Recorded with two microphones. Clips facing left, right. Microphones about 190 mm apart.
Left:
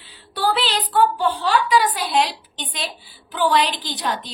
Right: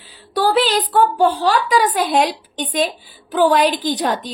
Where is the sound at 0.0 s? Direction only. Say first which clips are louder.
Right 5 dB; 40° right (ahead or behind).